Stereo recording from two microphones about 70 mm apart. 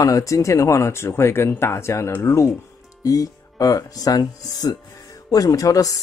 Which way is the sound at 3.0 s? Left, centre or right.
Left.